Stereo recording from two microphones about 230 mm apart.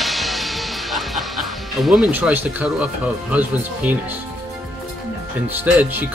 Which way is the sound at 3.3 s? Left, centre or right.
Centre.